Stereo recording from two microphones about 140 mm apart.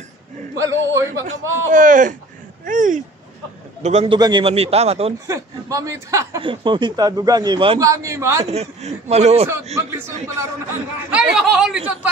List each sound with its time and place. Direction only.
0.6 s speech: 20° right (ahead or behind)
1.2 s a man's voice: 70° right (ahead or behind)
3.8 s a man's voice: 50° right (ahead or behind)
4.2 s a man's voice: 35° right (ahead or behind)
5.2 s speech: 25° right (ahead or behind)
6.4 s speech: 35° right (ahead or behind)
7.8 s speech: 20° right (ahead or behind)
8.5 s a man's voice: 50° right (ahead or behind)
9.8 s speech: 20° right (ahead or behind)
11.1 s speech: 5° right (ahead or behind)